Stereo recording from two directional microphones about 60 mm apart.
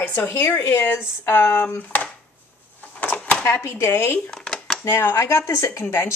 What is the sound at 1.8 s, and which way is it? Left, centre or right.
Speech, left.